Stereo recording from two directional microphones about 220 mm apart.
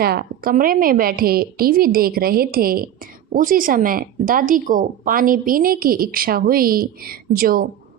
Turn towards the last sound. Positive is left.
turn(degrees=-40)  # may be behind; listen again after turning